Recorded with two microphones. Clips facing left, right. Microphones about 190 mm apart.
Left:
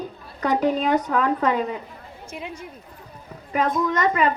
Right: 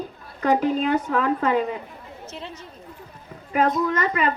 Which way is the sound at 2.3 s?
10° left (ahead or behind).